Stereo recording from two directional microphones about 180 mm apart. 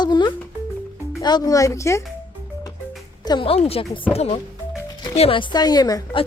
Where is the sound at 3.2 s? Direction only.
30° left (ahead or behind).